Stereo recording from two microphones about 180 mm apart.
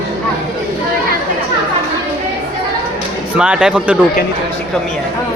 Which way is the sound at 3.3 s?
5° right (ahead or behind).